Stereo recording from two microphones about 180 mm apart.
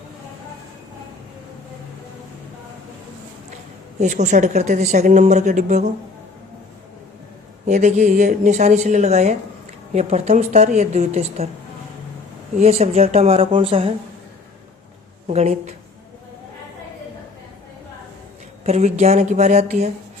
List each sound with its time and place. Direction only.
4.0 s a woman's voice: 40° right (ahead or behind)
7.6 s a woman's voice: 40° right (ahead or behind)
12.5 s a woman's voice: 35° right (ahead or behind)
15.3 s a woman's voice: 35° right (ahead or behind)
18.6 s a woman's voice: 35° right (ahead or behind)